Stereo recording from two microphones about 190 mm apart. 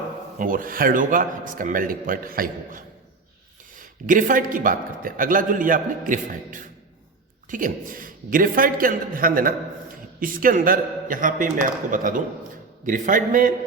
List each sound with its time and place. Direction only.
0.3 s a man's voice: 45° right (ahead or behind)